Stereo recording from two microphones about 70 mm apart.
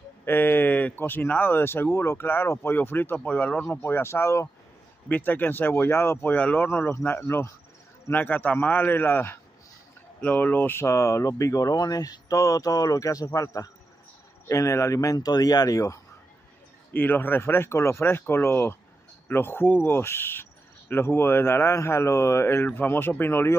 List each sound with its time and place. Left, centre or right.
0.2 s speech: left
3.7 s speech: left
5.0 s speech: left
10.9 s speech: left
15.1 s speech: left
16.9 s speech: left